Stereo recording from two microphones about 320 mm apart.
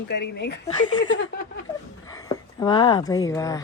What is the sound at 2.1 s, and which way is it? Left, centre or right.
Speech, centre.